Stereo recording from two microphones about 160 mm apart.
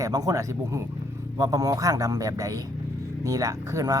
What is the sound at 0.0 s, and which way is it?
Speech, 20° right (ahead or behind).